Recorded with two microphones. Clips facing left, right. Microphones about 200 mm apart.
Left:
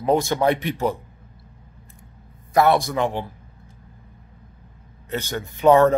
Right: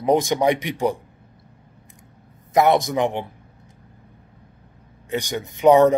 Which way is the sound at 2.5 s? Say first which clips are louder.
Right 1 dB; 20° right (ahead or behind).